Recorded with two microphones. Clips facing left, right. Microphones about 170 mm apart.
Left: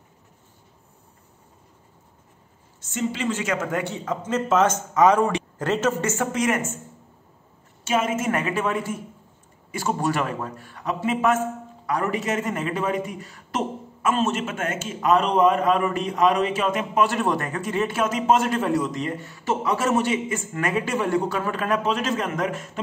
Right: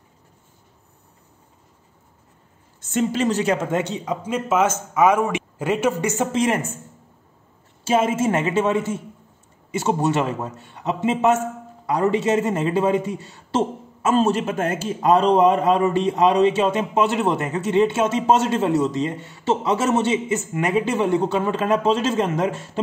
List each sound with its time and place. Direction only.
2.9 s a man's voice: 50° right (ahead or behind); by 6.2 s 15° right (ahead or behind)
6.3 s speech: 30° right (ahead or behind)
7.8 s a man's voice: 30° right (ahead or behind)